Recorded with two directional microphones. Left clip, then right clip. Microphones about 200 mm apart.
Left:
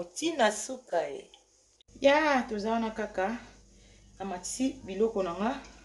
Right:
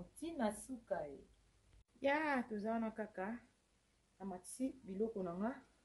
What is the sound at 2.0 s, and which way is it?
Speech, 40° right (ahead or behind).